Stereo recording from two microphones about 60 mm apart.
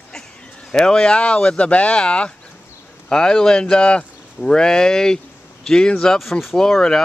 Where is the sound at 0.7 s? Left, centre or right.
Centre.